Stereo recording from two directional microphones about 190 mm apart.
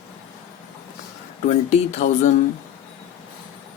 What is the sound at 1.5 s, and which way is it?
Speech, 35° left (ahead or behind).